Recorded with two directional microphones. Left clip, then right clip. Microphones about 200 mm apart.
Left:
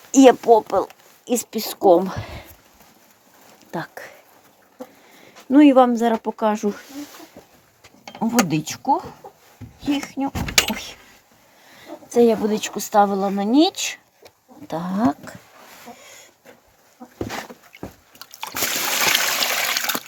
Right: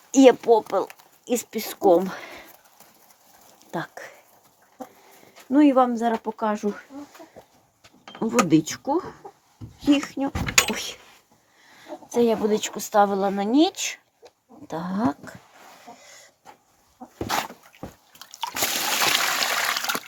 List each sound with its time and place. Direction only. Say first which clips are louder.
0.1 s speech: left 3 dB; 5° left (ahead or behind)
3.7 s speech: left 2 dB; 5° left (ahead or behind)
5.5 s speech: left 5 dB; 25° left (ahead or behind)
8.2 s speech: right 1 dB; 5° left (ahead or behind)
12.0 s speech: left 4 dB; 5° left (ahead or behind)
16.0 s hiss: left 4 dB; 5° left (ahead or behind)
17.2 s dog: right 7 dB; 30° right (ahead or behind)
17.7 s a sound: left 3 dB; 5° right (ahead or behind)
18.2 s a sound: even; 20° left (ahead or behind)
18.9 s trickle: left 3 dB; 10° left (ahead or behind)